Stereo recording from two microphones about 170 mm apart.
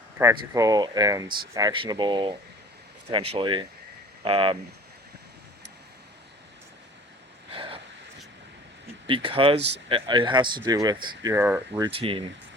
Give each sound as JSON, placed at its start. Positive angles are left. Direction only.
{"t": 0.2, "sound": "speech", "side_deg": -20}
{"t": 7.5, "sound": "a sound", "side_deg": -35}
{"t": 9.0, "sound": "speech", "side_deg": -30}
{"t": 9.6, "sound": "speech", "side_deg": -90}
{"t": 9.9, "sound": "speech", "side_deg": -30}
{"t": 11.8, "sound": "speech", "side_deg": -35}